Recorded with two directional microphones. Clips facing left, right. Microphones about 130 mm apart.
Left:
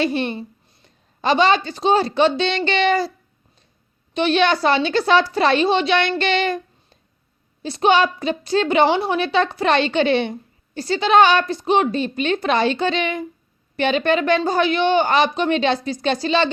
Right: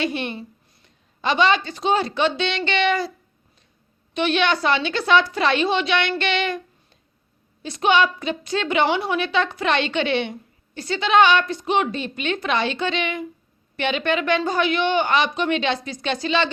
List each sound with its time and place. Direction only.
0.0 s a woman's voice: 35° left (ahead or behind)
4.1 s a woman's voice: 35° left (ahead or behind)